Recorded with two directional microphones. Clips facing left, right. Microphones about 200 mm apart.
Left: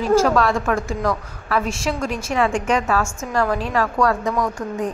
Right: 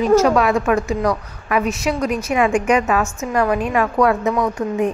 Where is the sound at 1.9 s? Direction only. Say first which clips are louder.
Right 4 dB; 10° right (ahead or behind).